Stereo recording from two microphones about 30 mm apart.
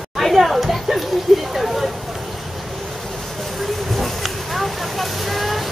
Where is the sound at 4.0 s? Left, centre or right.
Centre.